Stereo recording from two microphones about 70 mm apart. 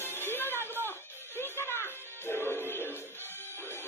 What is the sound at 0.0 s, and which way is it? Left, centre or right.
Music, left.